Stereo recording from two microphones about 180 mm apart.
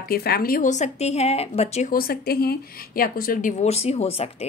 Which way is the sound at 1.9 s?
55° left (ahead or behind).